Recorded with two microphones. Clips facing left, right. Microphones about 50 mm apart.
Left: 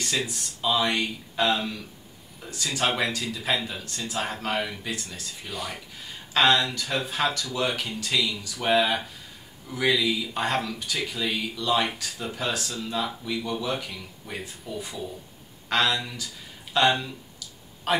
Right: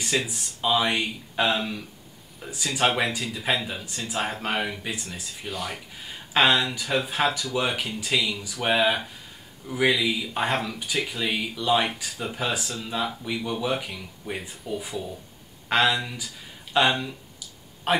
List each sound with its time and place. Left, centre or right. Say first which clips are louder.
0.0 s speech: right 2 dB; centre
5.5 s speech: right 2 dB; centre
6.3 s speech: even; centre